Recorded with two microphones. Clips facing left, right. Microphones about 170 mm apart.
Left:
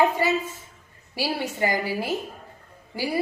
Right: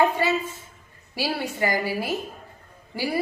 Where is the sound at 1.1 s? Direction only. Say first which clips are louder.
Even; 15° left (ahead or behind).